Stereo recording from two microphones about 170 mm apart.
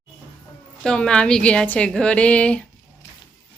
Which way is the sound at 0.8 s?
5° left (ahead or behind).